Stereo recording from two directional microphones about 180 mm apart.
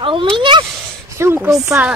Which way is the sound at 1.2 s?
15° right (ahead or behind).